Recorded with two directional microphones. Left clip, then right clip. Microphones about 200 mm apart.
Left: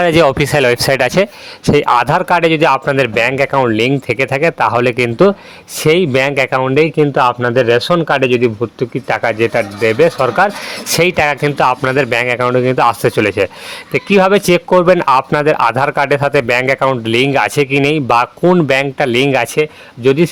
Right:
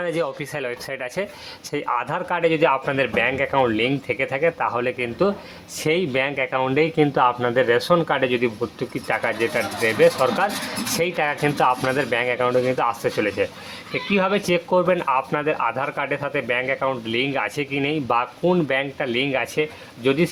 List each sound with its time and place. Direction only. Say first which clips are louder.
0.0 s speech: left 15 dB; 45° left (ahead or behind)
6.6 s speech: left 5 dB; 30° left (ahead or behind)
9.0 s speech: left 8 dB; 45° left (ahead or behind)